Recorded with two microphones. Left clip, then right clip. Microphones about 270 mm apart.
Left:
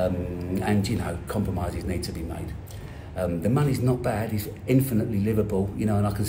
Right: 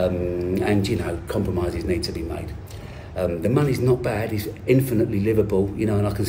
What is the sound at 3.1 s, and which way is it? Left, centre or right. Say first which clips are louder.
A man's voice: right 4 dB; centre.